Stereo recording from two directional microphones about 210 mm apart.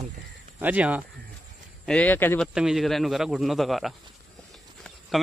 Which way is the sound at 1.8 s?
5° left (ahead or behind).